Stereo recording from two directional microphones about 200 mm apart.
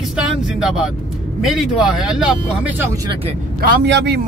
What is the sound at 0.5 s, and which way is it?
Speech, 5° right (ahead or behind).